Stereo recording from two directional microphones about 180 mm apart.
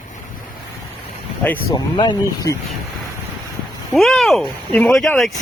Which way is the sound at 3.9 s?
Centre (ahead or behind).